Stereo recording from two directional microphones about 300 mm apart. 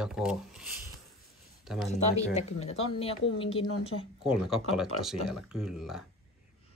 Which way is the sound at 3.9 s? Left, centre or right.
Left.